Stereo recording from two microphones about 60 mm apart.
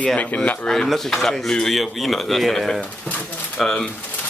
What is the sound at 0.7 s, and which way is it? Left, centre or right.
Speech, centre.